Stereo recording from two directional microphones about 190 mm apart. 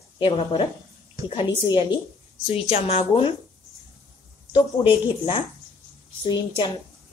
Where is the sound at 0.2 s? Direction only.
25° left (ahead or behind).